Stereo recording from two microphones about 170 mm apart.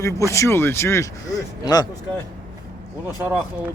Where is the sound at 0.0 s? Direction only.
15° left (ahead or behind).